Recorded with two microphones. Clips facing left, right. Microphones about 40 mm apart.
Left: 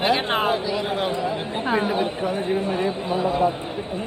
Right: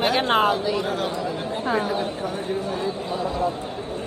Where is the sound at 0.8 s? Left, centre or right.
Left.